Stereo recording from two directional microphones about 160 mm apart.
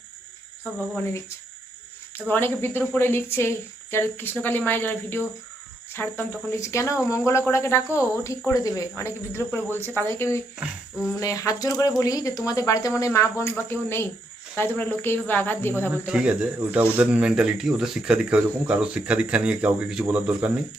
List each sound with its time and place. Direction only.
2.1 s speech: 10° left (ahead or behind)
10.6 s speech: 5° right (ahead or behind)
11.1 s speech: 20° left (ahead or behind)
16.0 s speech: 5° right (ahead or behind)